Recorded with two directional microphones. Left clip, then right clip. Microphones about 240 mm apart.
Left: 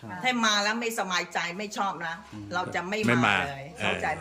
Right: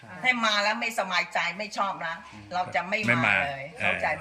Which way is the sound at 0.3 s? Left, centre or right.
Centre.